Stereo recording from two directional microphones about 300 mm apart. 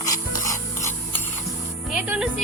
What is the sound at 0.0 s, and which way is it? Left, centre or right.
Filing, centre.